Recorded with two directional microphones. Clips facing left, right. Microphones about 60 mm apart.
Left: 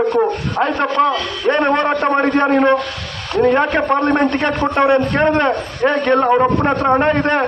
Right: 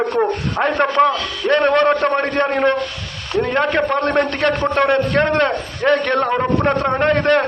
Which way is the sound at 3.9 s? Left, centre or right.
Centre.